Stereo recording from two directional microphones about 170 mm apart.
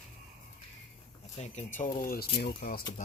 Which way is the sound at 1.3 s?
40° left (ahead or behind).